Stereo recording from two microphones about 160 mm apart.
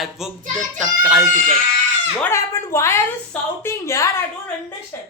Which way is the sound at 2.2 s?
15° left (ahead or behind).